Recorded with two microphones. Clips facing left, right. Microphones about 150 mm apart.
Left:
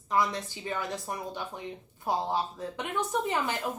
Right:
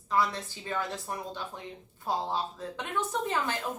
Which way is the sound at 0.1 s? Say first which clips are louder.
Left 1 dB; 15° left (ahead or behind).